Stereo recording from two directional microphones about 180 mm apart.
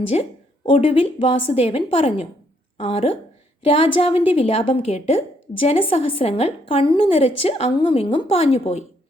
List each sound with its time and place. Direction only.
0.1 s a woman's voice: 30° left (ahead or behind)